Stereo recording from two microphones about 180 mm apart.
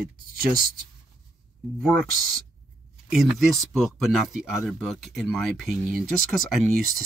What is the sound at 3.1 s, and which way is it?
Speech, centre (ahead or behind).